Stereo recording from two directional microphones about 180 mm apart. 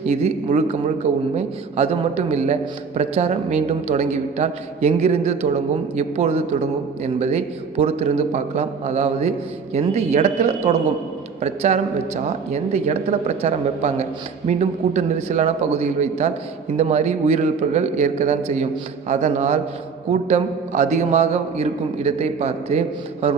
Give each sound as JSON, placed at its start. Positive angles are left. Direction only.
{"t": 0.0, "sound": "a man's voice", "side_deg": -35}